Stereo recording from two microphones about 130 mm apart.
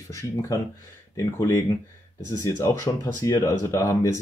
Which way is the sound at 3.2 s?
25° left (ahead or behind).